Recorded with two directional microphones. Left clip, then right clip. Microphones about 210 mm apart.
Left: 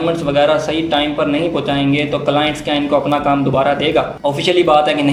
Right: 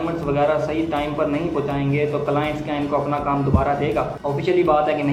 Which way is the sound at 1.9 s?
40° left (ahead or behind).